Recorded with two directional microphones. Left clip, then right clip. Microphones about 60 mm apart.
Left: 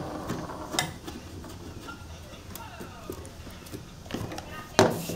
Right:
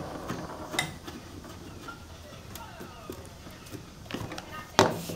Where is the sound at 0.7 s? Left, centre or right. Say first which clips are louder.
Left 1 dB; centre.